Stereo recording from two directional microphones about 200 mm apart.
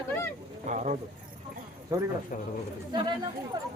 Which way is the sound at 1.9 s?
15° right (ahead or behind).